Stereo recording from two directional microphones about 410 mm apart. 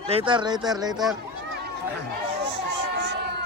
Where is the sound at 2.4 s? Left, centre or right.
Right.